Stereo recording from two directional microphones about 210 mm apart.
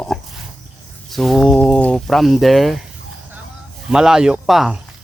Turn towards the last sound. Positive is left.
turn(degrees=0)  # may be behind; listen again after turning